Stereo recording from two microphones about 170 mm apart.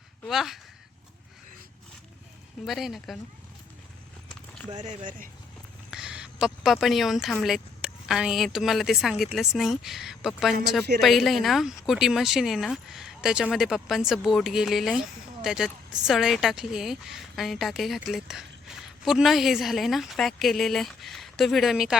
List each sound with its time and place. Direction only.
0.3 s speech: centre (ahead or behind)
2.6 s speech: centre (ahead or behind)
4.7 s speech: 45° right (ahead or behind)
5.9 s speech: 5° right (ahead or behind)